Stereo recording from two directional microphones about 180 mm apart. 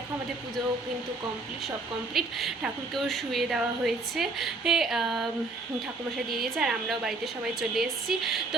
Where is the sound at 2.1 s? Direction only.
Centre (ahead or behind).